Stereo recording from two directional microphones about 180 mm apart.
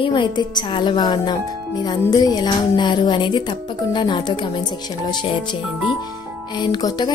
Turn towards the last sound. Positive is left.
turn(degrees=25)  # may be behind; listen again after turning